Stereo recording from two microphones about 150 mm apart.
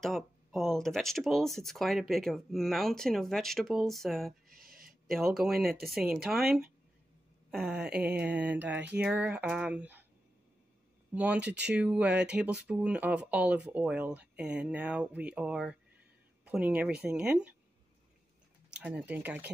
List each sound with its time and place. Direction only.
0.0 s speech: centre (ahead or behind)
4.6 s a sound: 75° right (ahead or behind)
5.0 s speech: centre (ahead or behind)
7.5 s speech: 5° right (ahead or behind)
11.1 s speech: 10° right (ahead or behind)
18.7 s speech: 5° right (ahead or behind)